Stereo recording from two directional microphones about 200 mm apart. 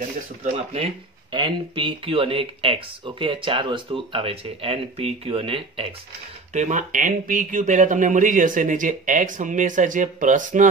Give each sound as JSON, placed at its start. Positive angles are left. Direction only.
{"t": 0.4, "sound": "speech", "side_deg": -30}